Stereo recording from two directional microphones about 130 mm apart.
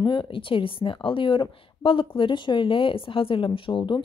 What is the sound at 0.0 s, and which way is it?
Speech, 40° left (ahead or behind).